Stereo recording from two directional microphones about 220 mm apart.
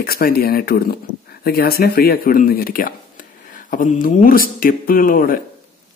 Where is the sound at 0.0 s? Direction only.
45° left (ahead or behind).